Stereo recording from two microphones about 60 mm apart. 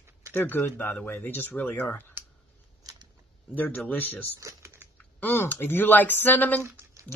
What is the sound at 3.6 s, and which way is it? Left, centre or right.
Speech, left.